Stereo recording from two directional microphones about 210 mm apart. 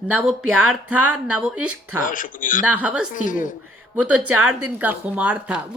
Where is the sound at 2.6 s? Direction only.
5° right (ahead or behind).